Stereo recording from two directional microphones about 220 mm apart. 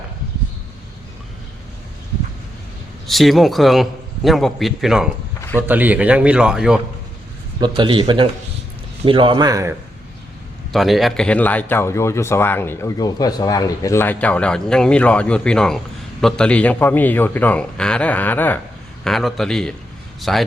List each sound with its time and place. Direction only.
3.1 s a man's voice: centre (ahead or behind)
7.6 s a man's voice: 20° right (ahead or behind)
10.7 s a man's voice: centre (ahead or behind)